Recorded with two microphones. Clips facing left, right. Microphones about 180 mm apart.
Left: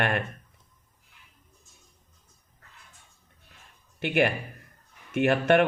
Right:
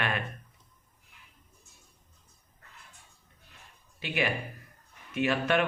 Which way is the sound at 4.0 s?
55° left (ahead or behind).